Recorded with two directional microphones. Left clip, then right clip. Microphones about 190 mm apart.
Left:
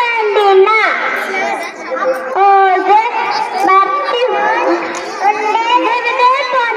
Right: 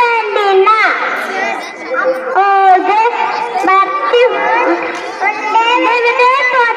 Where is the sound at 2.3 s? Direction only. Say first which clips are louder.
Right 1 dB; 25° right (ahead or behind).